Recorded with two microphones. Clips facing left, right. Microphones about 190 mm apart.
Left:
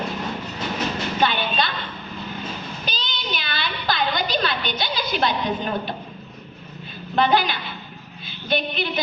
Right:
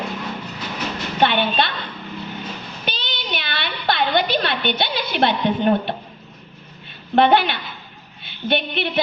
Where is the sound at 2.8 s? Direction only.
60° right (ahead or behind).